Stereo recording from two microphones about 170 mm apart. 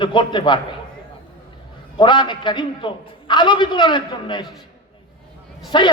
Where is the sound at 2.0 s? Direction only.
25° left (ahead or behind).